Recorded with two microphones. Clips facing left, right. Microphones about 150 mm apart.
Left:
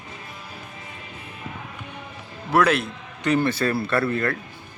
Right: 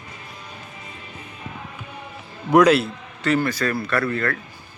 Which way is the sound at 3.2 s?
20° left (ahead or behind).